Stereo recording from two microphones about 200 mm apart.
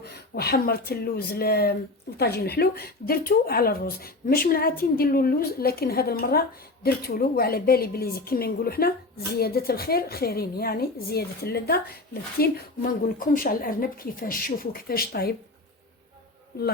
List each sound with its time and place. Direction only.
0.0 s a woman's voice: 55° left (ahead or behind)